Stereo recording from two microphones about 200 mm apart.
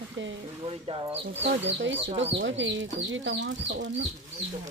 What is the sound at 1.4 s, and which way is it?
Speech, 65° right (ahead or behind).